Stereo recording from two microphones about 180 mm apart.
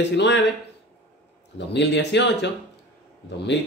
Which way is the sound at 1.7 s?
75° left (ahead or behind).